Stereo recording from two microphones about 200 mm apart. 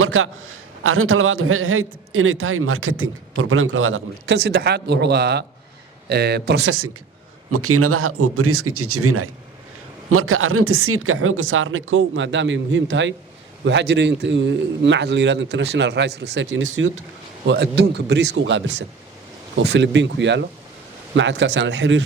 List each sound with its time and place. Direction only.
0.0 s a man's voice: 90° right
4.4 s a man's voice: 55° right (ahead or behind)
6.7 s a man's voice: 90° right; by 22.0 s 65° right (ahead or behind)